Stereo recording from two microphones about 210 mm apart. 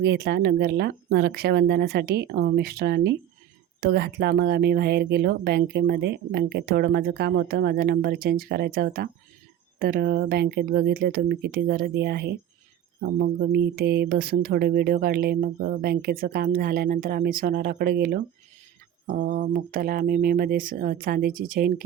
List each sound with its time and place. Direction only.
0.0 s speech: 50° right (ahead or behind)